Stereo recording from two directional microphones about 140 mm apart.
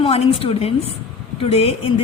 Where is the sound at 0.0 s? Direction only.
40° left (ahead or behind).